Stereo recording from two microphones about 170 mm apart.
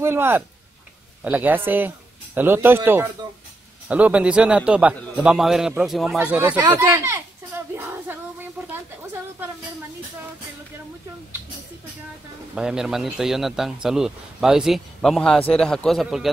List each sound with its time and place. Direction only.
0.0 s a man's voice: 15° right (ahead or behind)
12.5 s a man's voice: 5° right (ahead or behind)